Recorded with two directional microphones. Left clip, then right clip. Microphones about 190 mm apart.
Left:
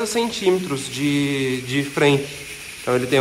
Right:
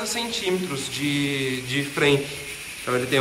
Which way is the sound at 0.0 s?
5° right (ahead or behind).